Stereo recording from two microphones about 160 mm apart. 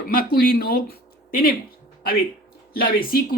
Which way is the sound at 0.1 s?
65° left (ahead or behind).